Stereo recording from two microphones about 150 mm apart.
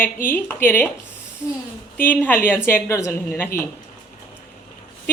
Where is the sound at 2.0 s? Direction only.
10° left (ahead or behind).